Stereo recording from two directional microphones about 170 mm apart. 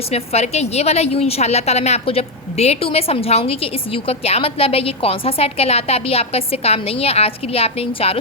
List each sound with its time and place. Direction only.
0.1 s a woman's voice: 40° left (ahead or behind)